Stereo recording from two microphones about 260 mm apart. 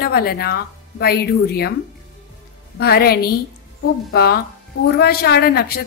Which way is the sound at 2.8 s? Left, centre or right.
Left.